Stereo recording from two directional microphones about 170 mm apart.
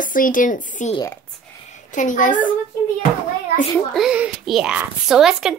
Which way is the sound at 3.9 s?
5° right (ahead or behind).